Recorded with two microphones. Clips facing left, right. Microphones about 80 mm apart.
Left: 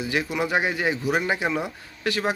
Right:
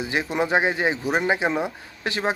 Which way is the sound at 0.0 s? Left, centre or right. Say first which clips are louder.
Right 1 dB; right.